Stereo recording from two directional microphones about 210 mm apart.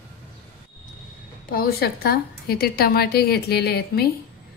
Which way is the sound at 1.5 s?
45° left (ahead or behind).